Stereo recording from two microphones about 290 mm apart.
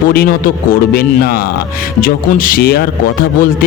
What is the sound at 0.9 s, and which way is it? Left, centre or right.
Speech, left.